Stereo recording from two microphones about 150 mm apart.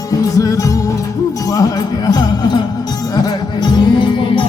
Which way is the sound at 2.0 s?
30° left (ahead or behind).